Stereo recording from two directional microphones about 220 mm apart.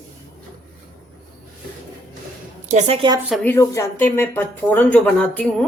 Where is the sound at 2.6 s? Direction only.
30° right (ahead or behind).